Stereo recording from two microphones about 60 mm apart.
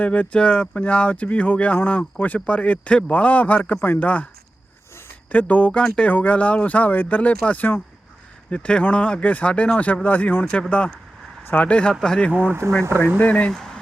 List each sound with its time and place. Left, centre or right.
0.0 s speech: left
3.8 s a man's voice: left
4.0 s speech: left
5.3 s speech: left
10.4 s speech: centre
11.4 s speech: left
11.7 s speech: centre
13.1 s speech: left
13.5 s speech: centre